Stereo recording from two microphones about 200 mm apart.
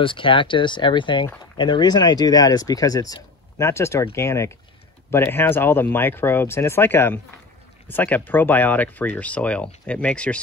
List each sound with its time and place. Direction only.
0.0 s speech: 25° left (ahead or behind); by 10.4 s 5° left (ahead or behind)